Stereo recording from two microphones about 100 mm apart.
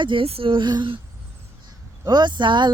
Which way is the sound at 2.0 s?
45° right (ahead or behind).